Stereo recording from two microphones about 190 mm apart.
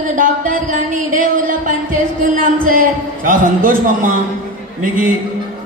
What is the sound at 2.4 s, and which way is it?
Music, 45° right (ahead or behind).